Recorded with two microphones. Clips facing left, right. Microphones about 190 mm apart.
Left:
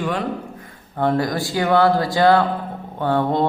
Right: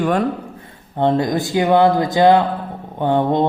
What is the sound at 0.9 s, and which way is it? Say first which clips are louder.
Speech: right 3 dB; 20° right (ahead or behind).